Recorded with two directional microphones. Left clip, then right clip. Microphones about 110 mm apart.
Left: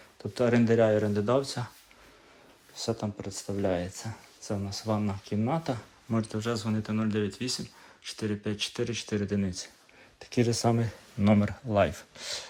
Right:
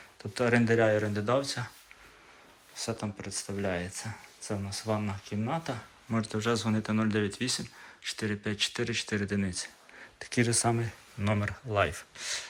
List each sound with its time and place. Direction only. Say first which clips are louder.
0.2 s speech: left 1 dB; 30° left (ahead or behind)
2.7 s speech: left 3 dB; 30° left (ahead or behind)
6.1 s speech: right 1 dB; 20° left (ahead or behind); by 12.5 s 40° left (ahead or behind)